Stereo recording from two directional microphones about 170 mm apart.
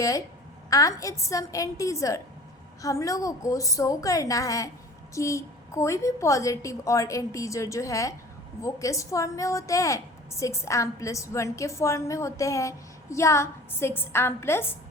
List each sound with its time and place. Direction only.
0.7 s a woman's voice: 20° left (ahead or behind)